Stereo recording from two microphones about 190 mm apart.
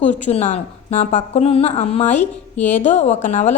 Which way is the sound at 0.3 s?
35° left (ahead or behind).